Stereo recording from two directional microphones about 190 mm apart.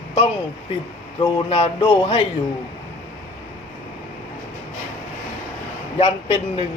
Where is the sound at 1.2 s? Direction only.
30° left (ahead or behind).